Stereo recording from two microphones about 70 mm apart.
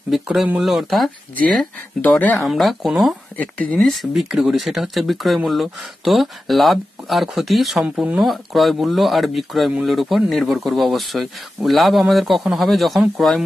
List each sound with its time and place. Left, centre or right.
0.1 s speech: centre
2.0 s speech: left
2.3 s speech: centre
3.3 s speech: centre
3.7 s speech: centre
7.8 s speech: right
8.2 s speech: centre